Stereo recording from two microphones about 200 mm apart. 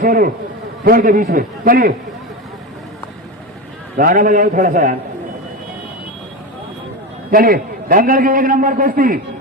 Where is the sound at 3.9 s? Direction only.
40° right (ahead or behind).